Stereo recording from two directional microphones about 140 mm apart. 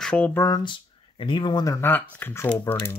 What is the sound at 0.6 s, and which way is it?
Speech, 35° left (ahead or behind).